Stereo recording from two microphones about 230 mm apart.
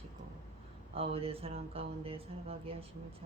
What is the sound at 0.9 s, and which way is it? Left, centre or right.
Speech, right.